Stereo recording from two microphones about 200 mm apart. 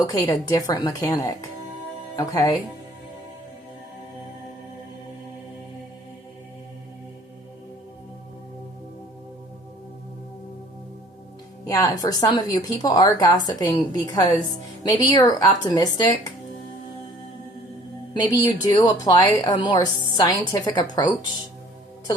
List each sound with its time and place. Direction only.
0.0 s a woman's voice: 15° left (ahead or behind)
11.7 s a woman's voice: 20° left (ahead or behind)
18.2 s a woman's voice: 20° left (ahead or behind)